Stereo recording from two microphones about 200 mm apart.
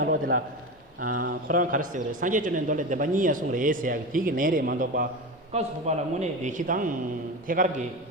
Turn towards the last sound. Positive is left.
turn(degrees=-40)  # may be behind; listen again after turning